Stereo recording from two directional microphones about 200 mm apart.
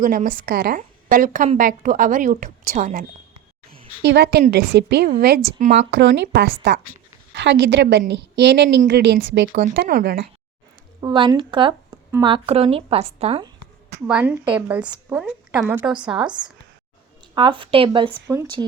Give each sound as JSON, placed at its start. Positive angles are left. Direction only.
{"t": 0.0, "sound": "a woman's voice", "side_deg": -45}
{"t": 4.0, "sound": "a woman's voice", "side_deg": -55}
{"t": 5.7, "sound": "a woman's voice", "side_deg": -60}
{"t": 11.0, "sound": "speech", "side_deg": -20}
{"t": 14.1, "sound": "a woman's voice", "side_deg": -5}
{"t": 16.2, "sound": "speech", "side_deg": -20}